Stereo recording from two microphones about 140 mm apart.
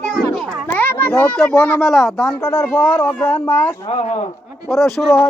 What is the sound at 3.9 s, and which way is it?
Speech, 50° left (ahead or behind).